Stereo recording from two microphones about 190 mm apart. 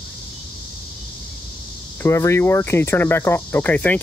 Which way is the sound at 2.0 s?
15° left (ahead or behind).